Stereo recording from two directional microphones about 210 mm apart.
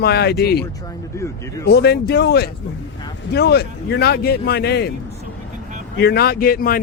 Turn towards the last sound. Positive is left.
turn(degrees=45)  # may be behind; listen again after turning